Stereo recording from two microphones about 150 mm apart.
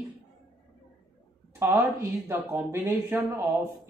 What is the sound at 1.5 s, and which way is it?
Speech, 15° right (ahead or behind).